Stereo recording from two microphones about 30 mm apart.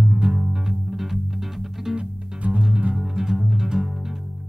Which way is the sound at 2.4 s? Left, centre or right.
Right.